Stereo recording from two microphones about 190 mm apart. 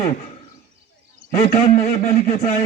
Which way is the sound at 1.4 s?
45° left (ahead or behind).